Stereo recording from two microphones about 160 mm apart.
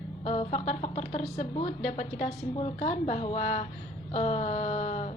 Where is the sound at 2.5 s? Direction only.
40° left (ahead or behind).